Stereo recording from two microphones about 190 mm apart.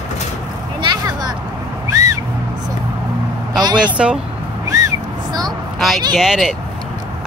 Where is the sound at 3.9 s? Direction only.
5° right (ahead or behind).